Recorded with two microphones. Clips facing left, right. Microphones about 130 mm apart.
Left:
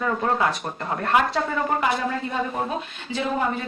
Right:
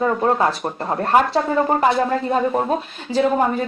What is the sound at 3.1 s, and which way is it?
Speech, 40° right (ahead or behind).